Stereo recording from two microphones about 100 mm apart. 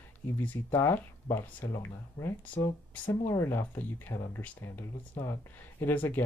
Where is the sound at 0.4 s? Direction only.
20° left (ahead or behind).